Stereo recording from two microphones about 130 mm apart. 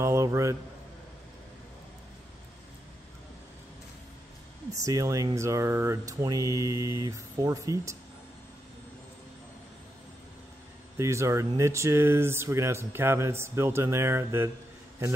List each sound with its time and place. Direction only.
0.0 s a sound: 20° right (ahead or behind)
4.8 s speech: 25° right (ahead or behind)
11.0 s speech: 20° right (ahead or behind)